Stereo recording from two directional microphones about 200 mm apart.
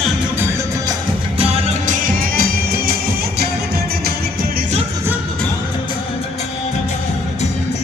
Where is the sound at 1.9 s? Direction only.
45° right (ahead or behind).